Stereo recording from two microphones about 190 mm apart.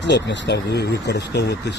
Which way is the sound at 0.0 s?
70° left (ahead or behind).